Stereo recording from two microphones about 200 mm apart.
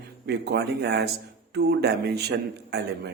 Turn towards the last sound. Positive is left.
turn(degrees=-55)  # may be behind; listen again after turning